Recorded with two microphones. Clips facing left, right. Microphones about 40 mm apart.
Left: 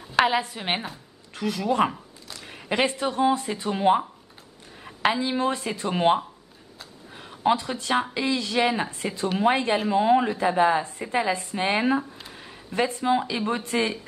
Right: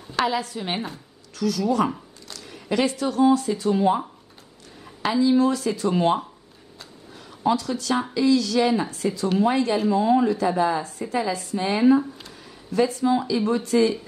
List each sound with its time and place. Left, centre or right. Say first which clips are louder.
0.1 s a woman's voice: left 2 dB; left
0.7 s speech: right 2 dB; centre
1.3 s speech: right 2 dB; left
4.8 s a woman's voice: right 3 dB; left